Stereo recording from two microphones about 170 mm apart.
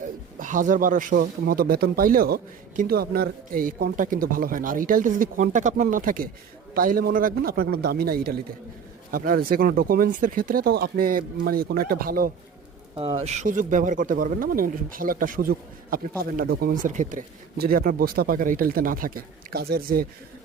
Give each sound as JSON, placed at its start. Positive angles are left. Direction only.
{"t": 0.3, "sound": "speech", "side_deg": -50}
{"t": 13.0, "sound": "speech", "side_deg": -35}